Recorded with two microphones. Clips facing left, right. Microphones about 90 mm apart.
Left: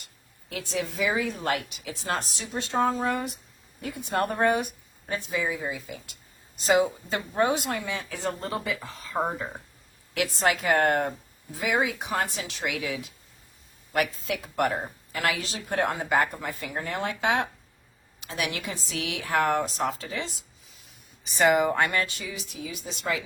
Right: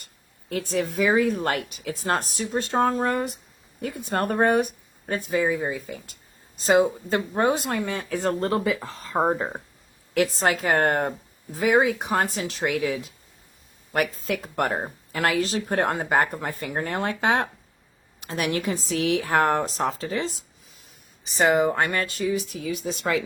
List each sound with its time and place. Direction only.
0.5 s speech: 45° right (ahead or behind)
7.7 s speech: 50° right (ahead or behind)